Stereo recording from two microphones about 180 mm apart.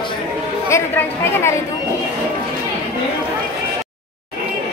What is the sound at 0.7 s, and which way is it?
Speech, 15° left (ahead or behind).